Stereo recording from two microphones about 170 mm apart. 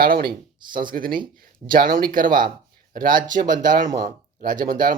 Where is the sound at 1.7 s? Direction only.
60° right (ahead or behind).